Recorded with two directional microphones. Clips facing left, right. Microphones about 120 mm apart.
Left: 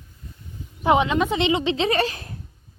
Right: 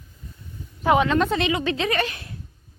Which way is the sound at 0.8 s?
20° left (ahead or behind).